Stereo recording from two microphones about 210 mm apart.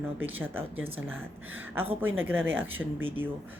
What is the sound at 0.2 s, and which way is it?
A woman's voice, 10° right (ahead or behind).